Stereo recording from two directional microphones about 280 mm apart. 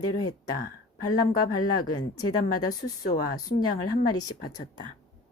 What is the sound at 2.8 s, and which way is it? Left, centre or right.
Speech, left.